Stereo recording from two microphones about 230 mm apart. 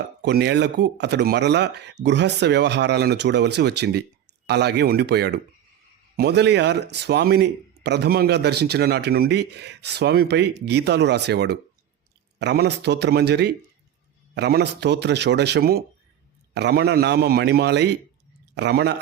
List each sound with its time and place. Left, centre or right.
0.2 s a man's voice: right